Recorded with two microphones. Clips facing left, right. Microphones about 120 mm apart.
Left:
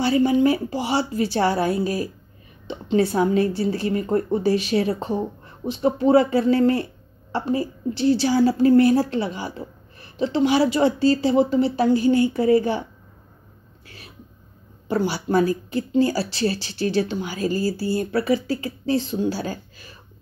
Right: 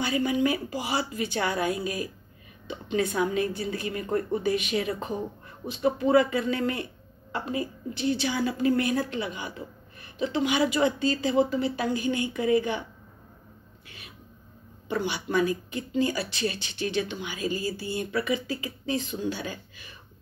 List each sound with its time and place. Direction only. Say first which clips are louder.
0.0 s a woman's voice: left 7 dB; 30° left (ahead or behind)
13.8 s a sound: left 4 dB; 35° left (ahead or behind)
14.9 s a woman's voice: left 7 dB; 35° left (ahead or behind)